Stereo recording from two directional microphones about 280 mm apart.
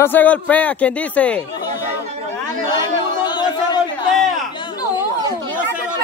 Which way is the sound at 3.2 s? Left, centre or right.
Centre.